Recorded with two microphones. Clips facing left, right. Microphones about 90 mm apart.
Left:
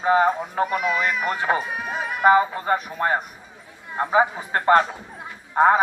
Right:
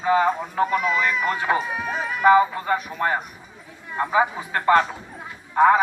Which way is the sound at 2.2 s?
30° left (ahead or behind).